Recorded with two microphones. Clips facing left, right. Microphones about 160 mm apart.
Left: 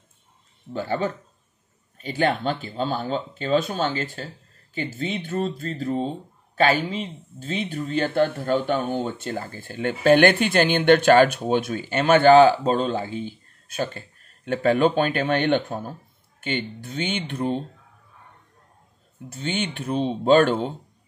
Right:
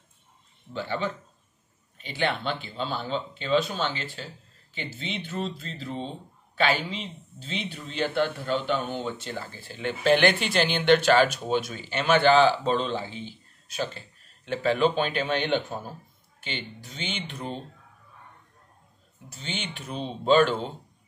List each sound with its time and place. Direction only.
0.7 s a man's voice: 45° left (ahead or behind)
19.2 s speech: 50° left (ahead or behind)